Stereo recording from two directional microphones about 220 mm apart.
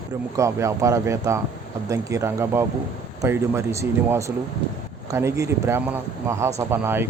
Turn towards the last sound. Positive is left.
turn(degrees=-10)  # may be behind; listen again after turning